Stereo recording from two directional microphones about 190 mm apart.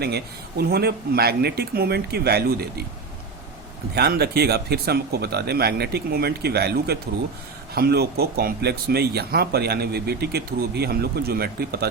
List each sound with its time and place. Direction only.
0.6 s speech: 55° right (ahead or behind)
3.9 s speech: 55° right (ahead or behind)